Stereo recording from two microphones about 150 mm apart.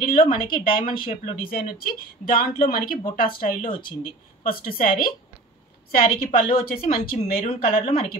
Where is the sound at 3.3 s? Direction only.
65° left (ahead or behind).